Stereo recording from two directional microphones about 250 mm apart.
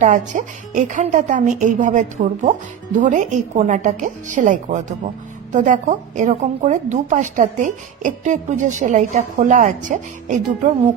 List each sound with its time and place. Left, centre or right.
0.0 s a woman's voice: right